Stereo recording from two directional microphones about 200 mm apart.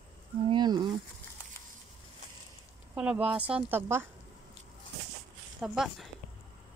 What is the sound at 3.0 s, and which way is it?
Speech, 5° right (ahead or behind).